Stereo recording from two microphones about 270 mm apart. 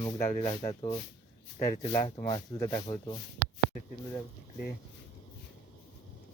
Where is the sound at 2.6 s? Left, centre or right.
Centre.